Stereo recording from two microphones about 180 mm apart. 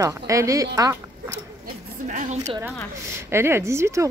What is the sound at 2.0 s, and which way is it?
Speech, 45° right (ahead or behind).